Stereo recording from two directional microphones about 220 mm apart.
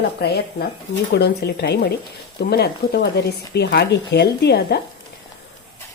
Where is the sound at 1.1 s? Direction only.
50° left (ahead or behind).